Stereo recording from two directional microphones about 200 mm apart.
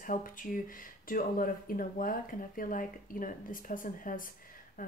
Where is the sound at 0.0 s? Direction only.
40° left (ahead or behind).